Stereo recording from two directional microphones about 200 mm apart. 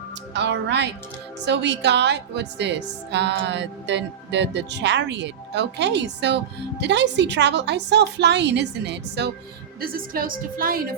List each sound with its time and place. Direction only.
0.3 s a woman's voice: 60° right (ahead or behind)
9.8 s a woman's voice: 45° right (ahead or behind)